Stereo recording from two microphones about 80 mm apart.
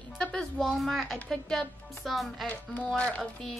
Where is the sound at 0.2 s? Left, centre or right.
Centre.